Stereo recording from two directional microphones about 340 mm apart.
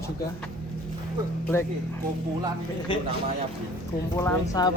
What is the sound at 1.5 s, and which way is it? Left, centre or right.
Speech, centre.